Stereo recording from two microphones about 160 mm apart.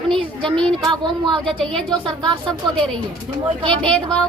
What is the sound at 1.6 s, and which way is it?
Speech, 5° left (ahead or behind).